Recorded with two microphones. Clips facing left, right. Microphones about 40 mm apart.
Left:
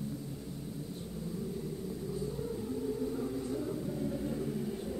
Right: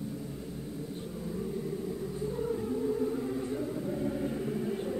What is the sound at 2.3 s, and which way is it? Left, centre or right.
Music, right.